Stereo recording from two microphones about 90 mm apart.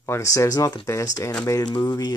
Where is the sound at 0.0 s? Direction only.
30° left (ahead or behind).